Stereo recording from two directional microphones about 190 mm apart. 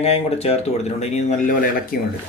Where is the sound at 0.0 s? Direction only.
35° left (ahead or behind).